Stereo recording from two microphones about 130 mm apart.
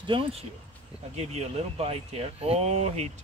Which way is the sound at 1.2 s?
55° right (ahead or behind).